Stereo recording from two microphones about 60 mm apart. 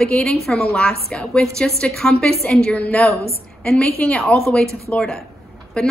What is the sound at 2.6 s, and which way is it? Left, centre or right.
A woman's voice, left.